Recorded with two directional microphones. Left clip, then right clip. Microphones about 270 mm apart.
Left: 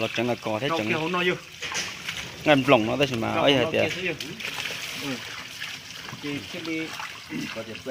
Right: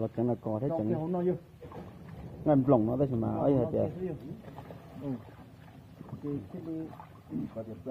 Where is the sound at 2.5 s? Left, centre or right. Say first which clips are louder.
Left 7 dB; left.